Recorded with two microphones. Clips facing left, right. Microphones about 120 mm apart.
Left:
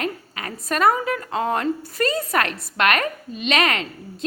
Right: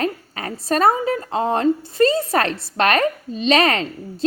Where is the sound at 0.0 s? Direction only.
35° right (ahead or behind).